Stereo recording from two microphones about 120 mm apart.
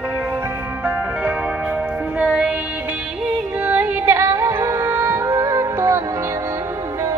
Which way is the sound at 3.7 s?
15° right (ahead or behind).